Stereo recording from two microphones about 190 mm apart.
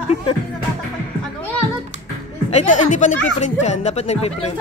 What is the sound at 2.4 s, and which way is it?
Speech, 35° left (ahead or behind).